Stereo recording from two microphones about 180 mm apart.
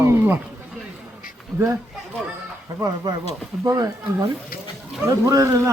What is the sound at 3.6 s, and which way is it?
A man's voice, 20° right (ahead or behind).